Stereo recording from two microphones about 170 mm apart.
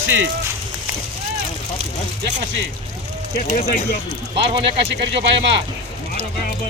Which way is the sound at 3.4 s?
55° left (ahead or behind).